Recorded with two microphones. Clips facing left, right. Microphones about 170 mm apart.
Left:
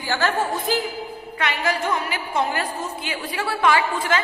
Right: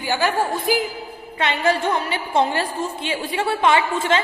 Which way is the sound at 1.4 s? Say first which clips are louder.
Right 4 dB; 25° right (ahead or behind).